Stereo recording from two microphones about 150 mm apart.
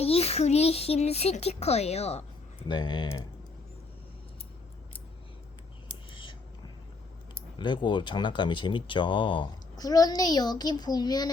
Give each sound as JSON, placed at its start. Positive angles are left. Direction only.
{"t": 0.0, "sound": "a child's voice", "side_deg": 40}
{"t": 2.6, "sound": "speech", "side_deg": 30}
{"t": 6.1, "sound": "a sound", "side_deg": 35}
{"t": 7.6, "sound": "speech", "side_deg": 30}